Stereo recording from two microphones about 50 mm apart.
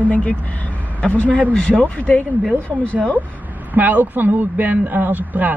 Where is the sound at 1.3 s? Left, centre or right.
Right.